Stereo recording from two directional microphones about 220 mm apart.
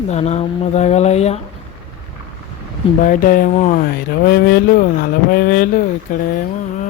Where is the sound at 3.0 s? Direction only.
40° left (ahead or behind).